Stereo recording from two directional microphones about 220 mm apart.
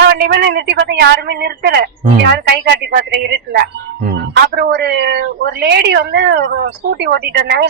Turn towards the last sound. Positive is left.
turn(degrees=-50)  # may be behind; listen again after turning